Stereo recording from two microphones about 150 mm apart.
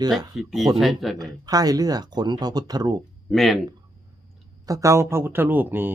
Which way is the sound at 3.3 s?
Centre (ahead or behind).